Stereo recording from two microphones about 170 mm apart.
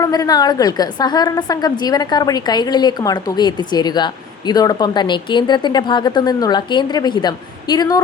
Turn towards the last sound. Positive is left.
turn(degrees=25)  # may be behind; listen again after turning